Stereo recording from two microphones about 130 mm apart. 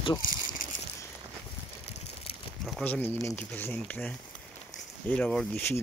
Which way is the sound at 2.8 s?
15° left (ahead or behind).